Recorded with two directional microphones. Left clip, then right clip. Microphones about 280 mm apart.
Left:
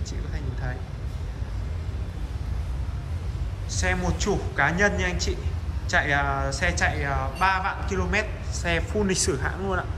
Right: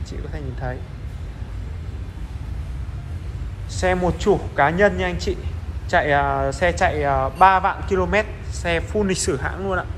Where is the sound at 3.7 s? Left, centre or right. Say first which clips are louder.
Right 7 dB; centre.